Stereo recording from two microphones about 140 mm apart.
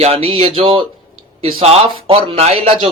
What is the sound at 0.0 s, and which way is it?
A man's voice, 45° right (ahead or behind).